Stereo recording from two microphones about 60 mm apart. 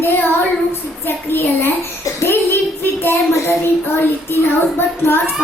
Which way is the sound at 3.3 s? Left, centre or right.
Left.